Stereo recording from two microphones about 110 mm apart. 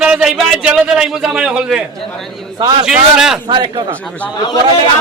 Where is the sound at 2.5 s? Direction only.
45° right (ahead or behind).